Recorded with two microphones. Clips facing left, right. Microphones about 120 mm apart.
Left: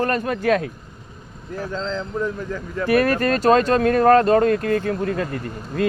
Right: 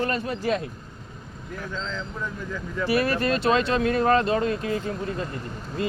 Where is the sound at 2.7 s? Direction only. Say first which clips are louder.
Left 5 dB; 50° left (ahead or behind).